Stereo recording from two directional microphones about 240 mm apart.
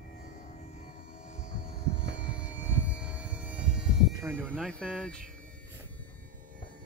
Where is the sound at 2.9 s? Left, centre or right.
Centre.